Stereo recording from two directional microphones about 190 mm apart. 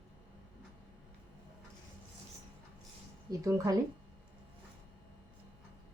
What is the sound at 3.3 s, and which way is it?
Speech, 15° right (ahead or behind).